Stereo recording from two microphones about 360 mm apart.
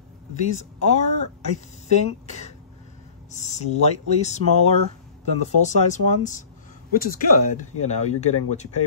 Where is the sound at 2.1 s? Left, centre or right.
Centre.